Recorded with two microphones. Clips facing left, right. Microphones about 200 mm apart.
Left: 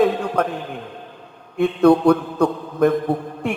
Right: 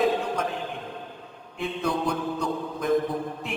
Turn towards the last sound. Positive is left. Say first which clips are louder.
# left 7 dB
turn(degrees=60)  # may be behind; listen again after turning